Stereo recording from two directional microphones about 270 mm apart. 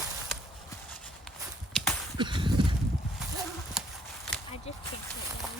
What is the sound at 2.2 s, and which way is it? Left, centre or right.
Whip, centre.